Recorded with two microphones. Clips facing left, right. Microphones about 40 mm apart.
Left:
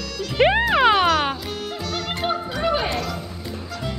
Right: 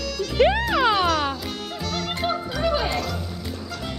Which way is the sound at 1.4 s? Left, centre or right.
Centre.